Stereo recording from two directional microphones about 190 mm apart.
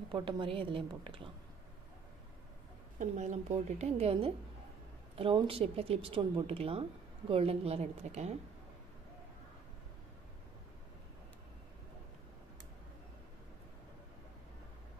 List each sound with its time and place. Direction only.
0.1 s a woman's voice: 25° right (ahead or behind)
3.0 s a woman's voice: 40° right (ahead or behind)